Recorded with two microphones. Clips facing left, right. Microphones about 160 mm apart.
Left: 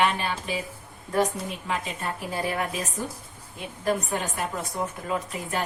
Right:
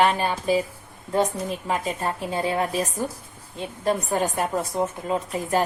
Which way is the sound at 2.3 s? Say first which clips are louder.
Right 4 dB; 25° right (ahead or behind).